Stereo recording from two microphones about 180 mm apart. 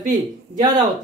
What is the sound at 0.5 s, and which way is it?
Speech, 20° right (ahead or behind).